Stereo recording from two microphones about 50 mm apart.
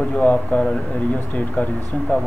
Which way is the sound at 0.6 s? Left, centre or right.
Centre.